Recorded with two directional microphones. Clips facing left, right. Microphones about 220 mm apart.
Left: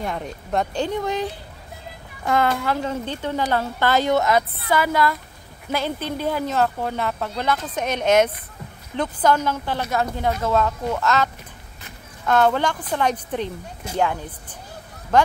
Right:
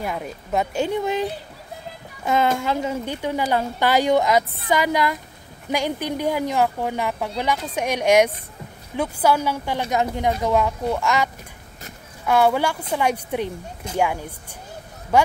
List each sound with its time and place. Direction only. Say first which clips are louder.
0.0 s a woman's voice: even; 5° right (ahead or behind)
2.2 s a woman's voice: even; 20° right (ahead or behind)
12.3 s a woman's voice: even; 10° right (ahead or behind)